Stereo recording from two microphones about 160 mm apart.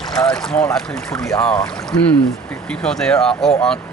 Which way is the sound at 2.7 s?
5° left (ahead or behind).